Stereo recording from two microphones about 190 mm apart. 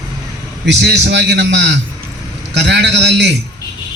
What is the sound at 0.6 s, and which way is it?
Speech, 65° right (ahead or behind).